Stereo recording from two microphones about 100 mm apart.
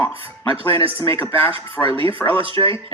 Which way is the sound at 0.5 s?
70° right (ahead or behind).